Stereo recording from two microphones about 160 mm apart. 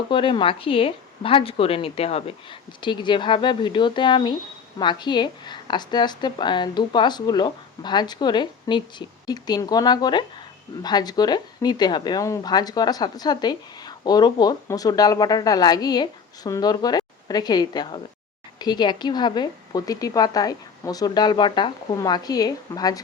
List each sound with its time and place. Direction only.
0.1 s a woman's voice: 30° left (ahead or behind)